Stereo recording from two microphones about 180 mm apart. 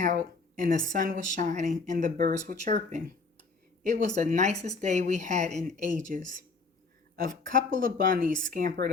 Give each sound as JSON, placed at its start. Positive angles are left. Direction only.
{"t": 0.0, "sound": "a woman's voice", "side_deg": -45}